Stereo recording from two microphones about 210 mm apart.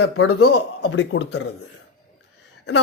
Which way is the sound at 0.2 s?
90° left.